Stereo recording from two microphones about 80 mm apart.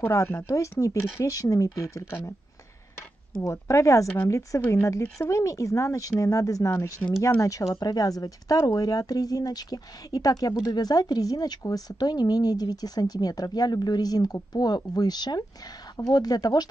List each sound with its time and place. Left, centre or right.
0.1 s speech: left
3.4 s speech: left
7.4 s speech: left